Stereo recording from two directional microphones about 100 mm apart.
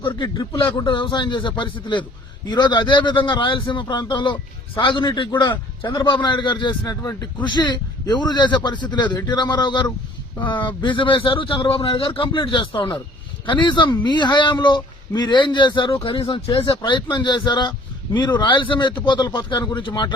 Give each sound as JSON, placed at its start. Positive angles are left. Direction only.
{"t": 0.3, "sound": "a man's voice", "side_deg": 35}
{"t": 0.9, "sound": "speech", "side_deg": 55}
{"t": 5.8, "sound": "a man's voice", "side_deg": 35}
{"t": 6.1, "sound": "speech", "side_deg": 50}
{"t": 6.8, "sound": "a man's voice", "side_deg": 35}
{"t": 7.4, "sound": "a man's voice", "side_deg": 50}